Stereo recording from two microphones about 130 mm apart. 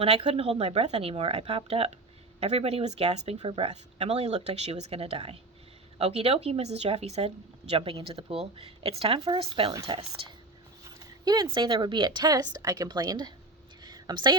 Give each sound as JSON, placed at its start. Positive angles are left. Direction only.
{"t": 0.3, "sound": "speech", "side_deg": -50}
{"t": 10.8, "sound": "a woman's voice", "side_deg": -30}
{"t": 13.8, "sound": "a sound", "side_deg": -35}